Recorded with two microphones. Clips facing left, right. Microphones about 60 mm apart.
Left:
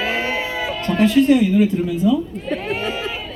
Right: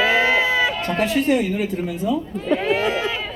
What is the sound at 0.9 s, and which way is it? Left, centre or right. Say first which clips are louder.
Music: left 8 dB; centre.